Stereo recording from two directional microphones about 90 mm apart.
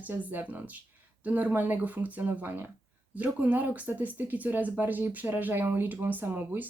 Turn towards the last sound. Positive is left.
turn(degrees=-20)  # may be behind; listen again after turning